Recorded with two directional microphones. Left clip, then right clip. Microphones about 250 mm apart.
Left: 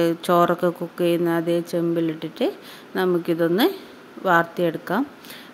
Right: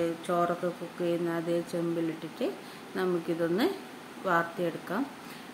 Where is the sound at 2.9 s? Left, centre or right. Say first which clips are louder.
Left 9 dB; left.